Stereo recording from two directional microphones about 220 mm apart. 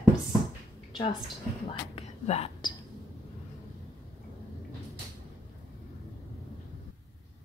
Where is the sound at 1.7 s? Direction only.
30° left (ahead or behind).